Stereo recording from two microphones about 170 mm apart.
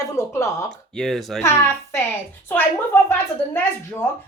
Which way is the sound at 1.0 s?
Centre (ahead or behind).